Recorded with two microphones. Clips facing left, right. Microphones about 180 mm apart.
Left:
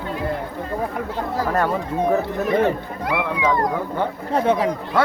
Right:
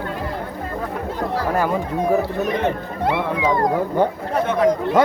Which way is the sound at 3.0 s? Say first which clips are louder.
Right 2 dB; 25° right (ahead or behind).